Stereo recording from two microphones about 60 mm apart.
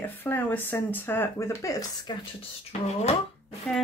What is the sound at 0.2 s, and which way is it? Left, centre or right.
Speech, left.